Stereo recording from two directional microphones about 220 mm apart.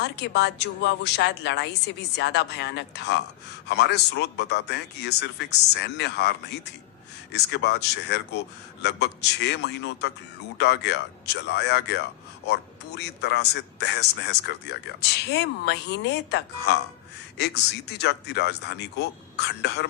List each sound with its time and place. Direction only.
0.0 s speech: 50° left (ahead or behind)
7.3 s speech: 50° left (ahead or behind)